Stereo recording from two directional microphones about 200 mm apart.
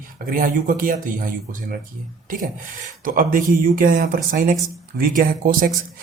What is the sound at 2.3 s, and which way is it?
Speech, 40° right (ahead or behind).